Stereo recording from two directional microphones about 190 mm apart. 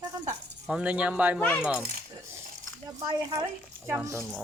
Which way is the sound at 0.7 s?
5° right (ahead or behind).